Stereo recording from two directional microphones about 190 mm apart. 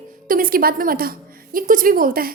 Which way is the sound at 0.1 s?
50° right (ahead or behind).